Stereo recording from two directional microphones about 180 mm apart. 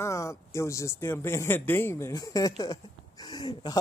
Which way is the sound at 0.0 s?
15° left (ahead or behind).